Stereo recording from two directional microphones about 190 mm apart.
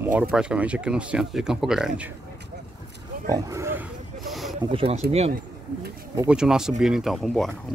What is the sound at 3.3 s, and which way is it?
Speech, 15° right (ahead or behind).